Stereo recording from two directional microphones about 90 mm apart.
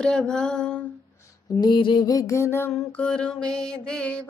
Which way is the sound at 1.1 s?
35° left (ahead or behind).